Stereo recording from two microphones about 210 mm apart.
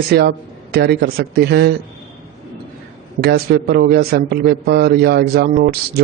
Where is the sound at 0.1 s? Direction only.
50° right (ahead or behind).